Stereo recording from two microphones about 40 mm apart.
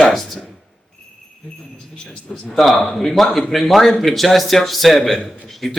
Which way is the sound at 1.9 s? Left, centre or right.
Centre.